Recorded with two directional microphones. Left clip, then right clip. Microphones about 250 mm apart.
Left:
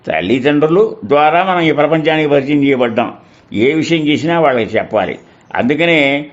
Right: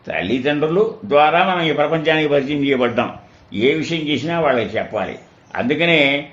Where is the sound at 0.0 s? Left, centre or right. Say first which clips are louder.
Left 6 dB; left.